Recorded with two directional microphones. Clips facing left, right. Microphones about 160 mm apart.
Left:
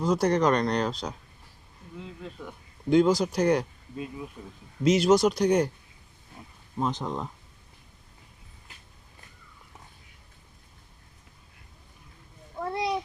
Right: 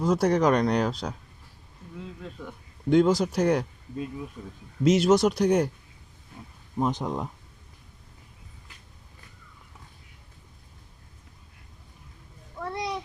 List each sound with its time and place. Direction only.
0.0 s speech: 5° right (ahead or behind)
2.2 s speech: centre (ahead or behind)
6.7 s speech: 15° right (ahead or behind)
12.5 s a sound: 25° left (ahead or behind)